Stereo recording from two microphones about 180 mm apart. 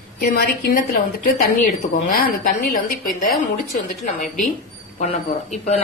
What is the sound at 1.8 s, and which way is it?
Speech, 45° left (ahead or behind).